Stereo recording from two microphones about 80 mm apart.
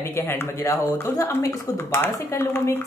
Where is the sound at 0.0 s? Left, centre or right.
Left.